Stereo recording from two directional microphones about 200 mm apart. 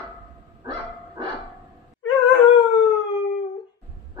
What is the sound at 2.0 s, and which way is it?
Dog, 20° left (ahead or behind).